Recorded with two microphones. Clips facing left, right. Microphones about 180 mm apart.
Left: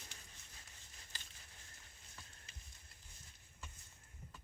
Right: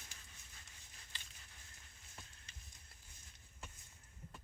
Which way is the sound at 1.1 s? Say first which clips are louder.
Left 1 dB; 40° left (ahead or behind).